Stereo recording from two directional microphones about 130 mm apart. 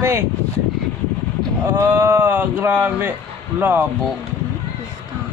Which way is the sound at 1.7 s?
20° right (ahead or behind).